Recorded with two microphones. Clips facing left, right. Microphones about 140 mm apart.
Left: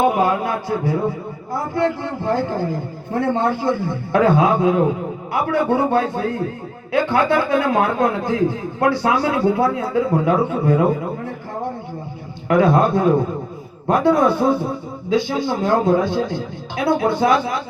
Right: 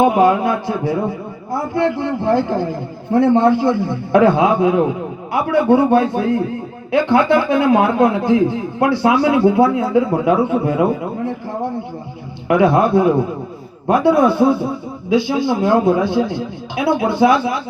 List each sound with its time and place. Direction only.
0.0 s speech: 15° right (ahead or behind)
12.5 s speech: 15° right (ahead or behind)
15.4 s speech: 10° right (ahead or behind)